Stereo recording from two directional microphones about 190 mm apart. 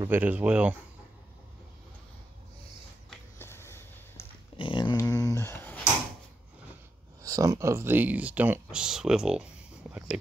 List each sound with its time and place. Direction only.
0.1 s speech: 10° right (ahead or behind)
3.3 s a sound: 15° left (ahead or behind)
4.6 s dog: 25° left (ahead or behind); by 5.9 s 10° left (ahead or behind)
7.2 s speech: 15° right (ahead or behind)